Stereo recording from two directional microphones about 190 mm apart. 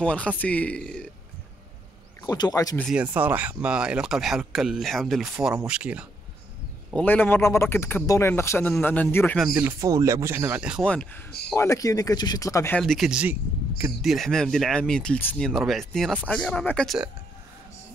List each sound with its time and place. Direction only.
0.0 s a man's voice: 5° left (ahead or behind)
2.2 s speech: 20° left (ahead or behind)
2.8 s speech: 5° right (ahead or behind)
6.9 s a man's voice: 5° left (ahead or behind)
9.4 s speech: 10° right (ahead or behind)
10.8 s speech: 5° left (ahead or behind)
11.5 s a man's voice: 15° left (ahead or behind)
12.8 s speech: centre (ahead or behind)
14.0 s speech: centre (ahead or behind)